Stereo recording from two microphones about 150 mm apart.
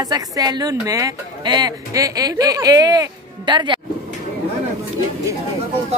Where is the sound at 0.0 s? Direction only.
25° right (ahead or behind).